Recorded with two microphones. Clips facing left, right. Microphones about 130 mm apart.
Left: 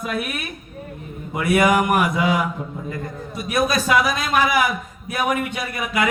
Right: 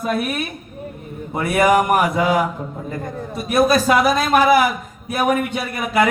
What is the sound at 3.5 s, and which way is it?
A man's voice, 35° right (ahead or behind).